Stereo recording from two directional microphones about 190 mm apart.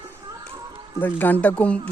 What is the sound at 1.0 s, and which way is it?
Speech, 10° left (ahead or behind).